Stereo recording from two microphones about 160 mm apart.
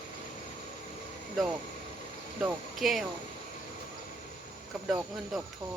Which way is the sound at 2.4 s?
Centre (ahead or behind).